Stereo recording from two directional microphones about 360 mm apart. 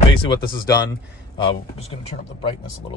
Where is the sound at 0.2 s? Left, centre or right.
Centre.